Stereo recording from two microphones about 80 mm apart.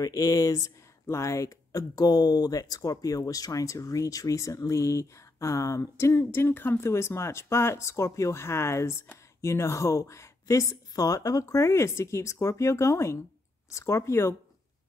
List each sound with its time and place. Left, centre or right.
0.0 s speech: left